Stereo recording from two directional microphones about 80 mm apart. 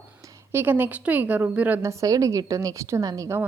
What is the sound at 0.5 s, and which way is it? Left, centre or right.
A woman's voice, right.